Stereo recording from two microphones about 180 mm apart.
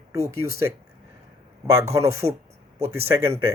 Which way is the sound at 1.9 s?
15° right (ahead or behind).